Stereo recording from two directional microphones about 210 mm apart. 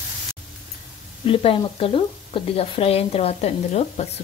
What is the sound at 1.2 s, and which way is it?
Speech, 25° left (ahead or behind).